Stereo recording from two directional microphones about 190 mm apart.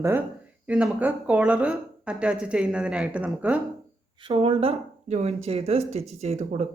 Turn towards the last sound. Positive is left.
turn(degrees=-35)  # may be behind; listen again after turning